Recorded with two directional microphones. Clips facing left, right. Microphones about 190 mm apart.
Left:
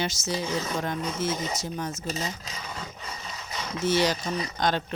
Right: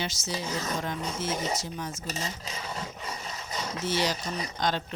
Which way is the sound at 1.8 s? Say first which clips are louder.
Left 4 dB; 40° left (ahead or behind).